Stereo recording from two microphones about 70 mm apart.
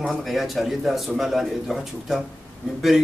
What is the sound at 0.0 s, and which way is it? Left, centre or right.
Speech, centre.